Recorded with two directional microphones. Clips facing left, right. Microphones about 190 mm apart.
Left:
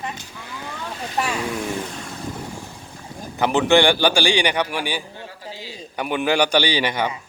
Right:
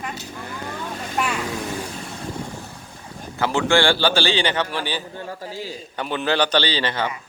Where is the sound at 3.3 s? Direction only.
20° left (ahead or behind).